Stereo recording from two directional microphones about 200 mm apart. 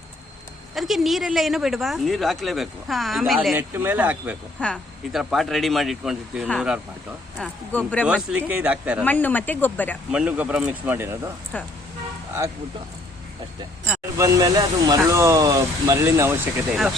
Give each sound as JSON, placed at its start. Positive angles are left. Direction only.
{"t": 0.7, "sound": "speech", "side_deg": 0}
{"t": 4.6, "sound": "speech", "side_deg": 5}
{"t": 8.0, "sound": "speech", "side_deg": -5}
{"t": 9.0, "sound": "speech", "side_deg": 10}
{"t": 10.1, "sound": "speech", "side_deg": -5}
{"t": 11.5, "sound": "speech", "side_deg": 5}
{"t": 14.2, "sound": "speech", "side_deg": -15}